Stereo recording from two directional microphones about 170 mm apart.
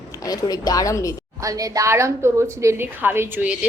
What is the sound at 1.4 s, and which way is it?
A woman's voice, 20° right (ahead or behind).